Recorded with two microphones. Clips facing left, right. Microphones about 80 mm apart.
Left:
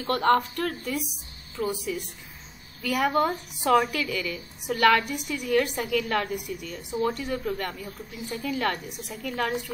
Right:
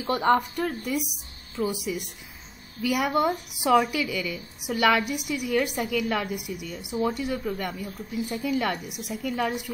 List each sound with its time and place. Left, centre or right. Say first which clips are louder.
0.0 s a woman's voice: even; centre